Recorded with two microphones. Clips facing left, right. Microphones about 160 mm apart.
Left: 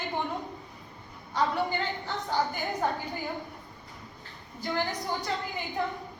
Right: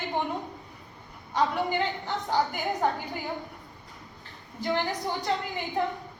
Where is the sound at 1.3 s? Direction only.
20° right (ahead or behind).